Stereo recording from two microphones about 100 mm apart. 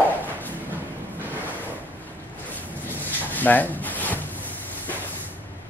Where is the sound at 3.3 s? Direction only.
15° left (ahead or behind).